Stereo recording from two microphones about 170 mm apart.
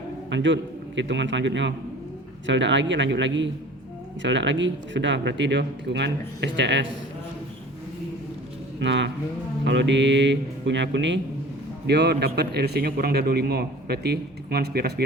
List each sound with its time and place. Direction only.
0.3 s speech: 90° right
8.8 s speech: 90° right
11.9 s a man's voice: 80° right